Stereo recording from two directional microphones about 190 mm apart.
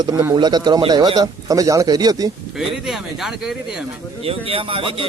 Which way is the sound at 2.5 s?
Centre (ahead or behind).